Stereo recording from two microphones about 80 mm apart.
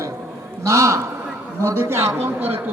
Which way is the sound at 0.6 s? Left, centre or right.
Right.